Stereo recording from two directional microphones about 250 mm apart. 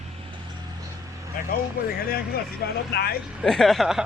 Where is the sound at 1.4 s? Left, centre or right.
Left.